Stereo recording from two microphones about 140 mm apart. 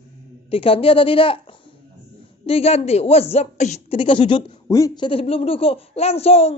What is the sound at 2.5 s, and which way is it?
A child's voice, 45° left (ahead or behind).